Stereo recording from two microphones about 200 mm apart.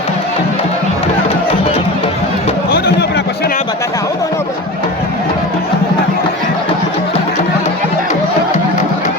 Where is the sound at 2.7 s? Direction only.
55° left (ahead or behind).